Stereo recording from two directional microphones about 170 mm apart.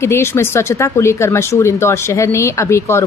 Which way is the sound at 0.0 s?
15° left (ahead or behind).